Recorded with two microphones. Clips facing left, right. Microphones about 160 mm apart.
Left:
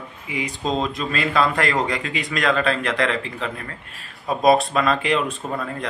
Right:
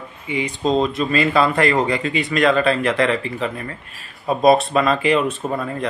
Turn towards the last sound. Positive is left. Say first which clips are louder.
# right 4 dB
turn(degrees=-10)  # may be behind; listen again after turning